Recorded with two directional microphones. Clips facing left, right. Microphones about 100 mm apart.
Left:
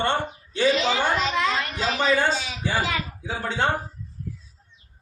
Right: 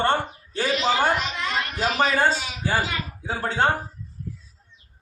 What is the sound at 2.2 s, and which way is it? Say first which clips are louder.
A man's voice: right 2 dB; 45° right (ahead or behind).